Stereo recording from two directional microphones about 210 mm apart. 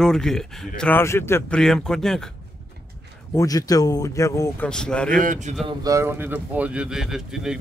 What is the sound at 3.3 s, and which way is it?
Speech, 15° left (ahead or behind).